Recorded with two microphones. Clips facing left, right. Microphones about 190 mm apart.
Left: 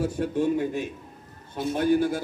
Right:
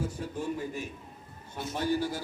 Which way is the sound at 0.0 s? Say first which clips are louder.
Left 9 dB; 70° left (ahead or behind).